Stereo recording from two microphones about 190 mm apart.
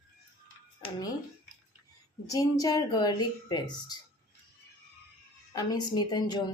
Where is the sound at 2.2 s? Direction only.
20° left (ahead or behind).